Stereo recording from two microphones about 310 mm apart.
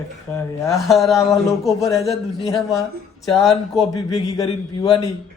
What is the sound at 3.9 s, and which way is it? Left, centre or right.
Speech, centre.